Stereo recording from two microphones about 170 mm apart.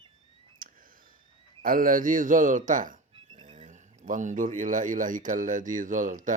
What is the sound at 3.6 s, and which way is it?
Speech, 45° right (ahead or behind).